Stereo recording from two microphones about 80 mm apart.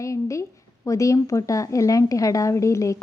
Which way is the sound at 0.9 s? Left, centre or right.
Left.